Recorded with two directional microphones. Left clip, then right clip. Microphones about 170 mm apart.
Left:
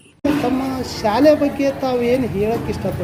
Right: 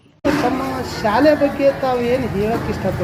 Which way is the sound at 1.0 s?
30° left (ahead or behind).